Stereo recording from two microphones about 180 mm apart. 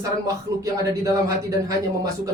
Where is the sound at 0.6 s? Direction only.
15° right (ahead or behind).